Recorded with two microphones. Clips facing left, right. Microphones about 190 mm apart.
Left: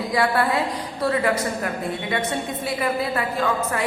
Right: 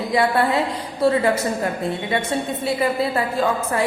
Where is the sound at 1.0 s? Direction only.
25° right (ahead or behind).